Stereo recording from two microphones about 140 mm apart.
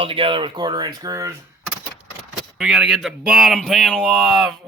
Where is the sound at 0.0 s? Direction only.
40° right (ahead or behind); by 1.3 s 25° right (ahead or behind).